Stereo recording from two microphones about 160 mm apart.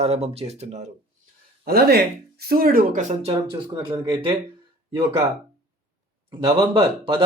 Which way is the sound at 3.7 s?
30° right (ahead or behind).